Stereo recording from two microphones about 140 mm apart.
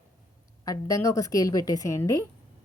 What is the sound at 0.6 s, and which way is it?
A woman's voice, 25° left (ahead or behind).